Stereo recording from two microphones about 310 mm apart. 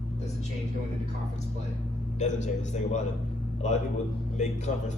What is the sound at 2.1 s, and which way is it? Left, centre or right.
Speech, left.